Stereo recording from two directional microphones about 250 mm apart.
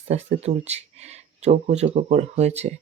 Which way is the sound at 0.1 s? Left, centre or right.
Right.